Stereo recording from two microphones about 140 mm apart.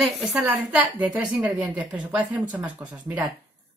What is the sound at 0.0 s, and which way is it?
A woman's voice, centre (ahead or behind).